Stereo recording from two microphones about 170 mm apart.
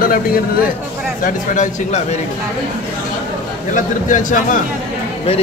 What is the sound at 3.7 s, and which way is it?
Speech, 50° left (ahead or behind).